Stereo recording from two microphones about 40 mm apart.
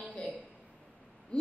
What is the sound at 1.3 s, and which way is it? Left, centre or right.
Hoot, left.